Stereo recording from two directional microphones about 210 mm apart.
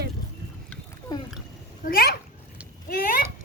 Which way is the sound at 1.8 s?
45° left (ahead or behind).